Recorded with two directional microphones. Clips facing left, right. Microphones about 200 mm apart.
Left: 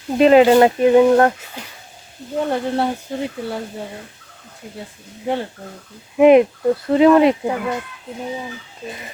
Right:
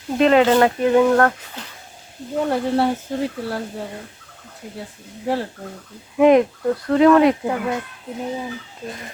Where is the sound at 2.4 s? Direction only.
Centre (ahead or behind).